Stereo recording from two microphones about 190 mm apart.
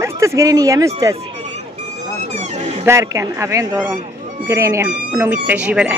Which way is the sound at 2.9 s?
15° right (ahead or behind).